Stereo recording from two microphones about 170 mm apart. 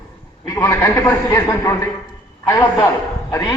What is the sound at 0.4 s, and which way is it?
A man's voice, 20° left (ahead or behind).